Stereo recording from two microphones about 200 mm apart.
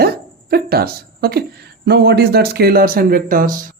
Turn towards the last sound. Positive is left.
turn(degrees=-45)  # may be behind; listen again after turning